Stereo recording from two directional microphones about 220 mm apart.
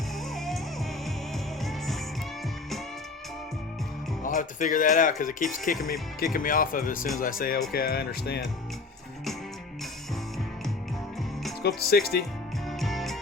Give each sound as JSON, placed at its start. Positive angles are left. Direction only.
{"t": 0.3, "sound": "music", "side_deg": 0}
{"t": 4.2, "sound": "speech", "side_deg": 35}
{"t": 11.8, "sound": "speech", "side_deg": 45}
{"t": 12.6, "sound": "music", "side_deg": 0}